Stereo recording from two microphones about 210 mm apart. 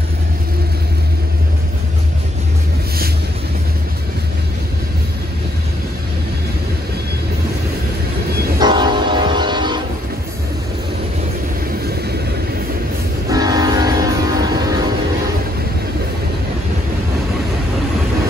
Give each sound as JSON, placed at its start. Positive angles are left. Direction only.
{"t": 8.5, "sound": "train", "side_deg": -20}
{"t": 11.8, "sound": "vehicle", "side_deg": -50}
{"t": 13.3, "sound": "train", "side_deg": -15}